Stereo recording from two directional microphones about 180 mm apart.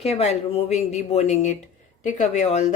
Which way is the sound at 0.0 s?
35° left (ahead or behind).